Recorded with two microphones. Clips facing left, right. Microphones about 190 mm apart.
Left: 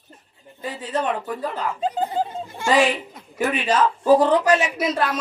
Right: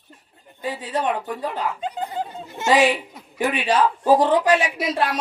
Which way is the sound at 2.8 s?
45° left (ahead or behind).